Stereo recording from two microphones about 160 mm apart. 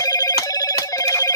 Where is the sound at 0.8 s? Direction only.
20° left (ahead or behind).